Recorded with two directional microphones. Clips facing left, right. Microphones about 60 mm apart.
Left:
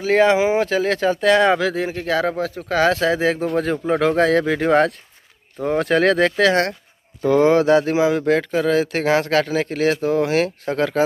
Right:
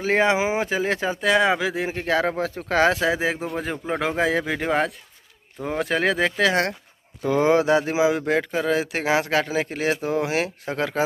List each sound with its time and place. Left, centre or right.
0.0 s speech: right
1.2 s speech: centre
3.7 s speech: centre